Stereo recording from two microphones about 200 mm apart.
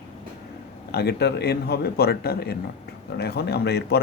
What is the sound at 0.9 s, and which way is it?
A man's voice, 55° left (ahead or behind).